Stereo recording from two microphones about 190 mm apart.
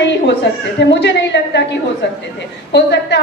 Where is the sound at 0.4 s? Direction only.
65° left (ahead or behind).